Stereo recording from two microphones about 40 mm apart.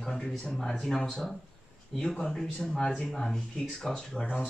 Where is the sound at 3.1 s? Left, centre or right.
Centre.